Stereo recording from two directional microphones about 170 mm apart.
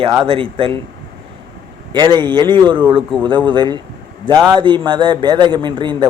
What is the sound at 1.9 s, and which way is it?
Speech, 25° right (ahead or behind).